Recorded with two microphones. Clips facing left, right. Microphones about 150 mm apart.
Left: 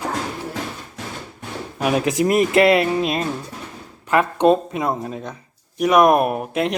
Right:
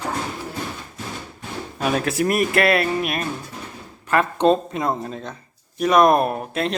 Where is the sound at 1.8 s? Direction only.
15° left (ahead or behind).